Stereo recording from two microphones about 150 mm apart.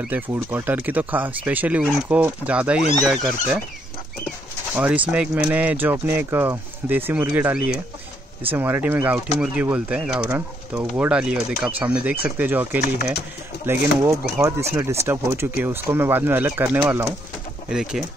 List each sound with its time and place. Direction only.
0.3 s speech: 15° right (ahead or behind)
2.8 s speech: 50° left (ahead or behind)
3.1 s speech: centre (ahead or behind)
4.7 s speech: 10° right (ahead or behind)
17.6 s speech: 5° right (ahead or behind)